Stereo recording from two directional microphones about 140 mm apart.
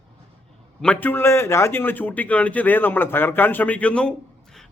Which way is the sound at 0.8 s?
10° left (ahead or behind).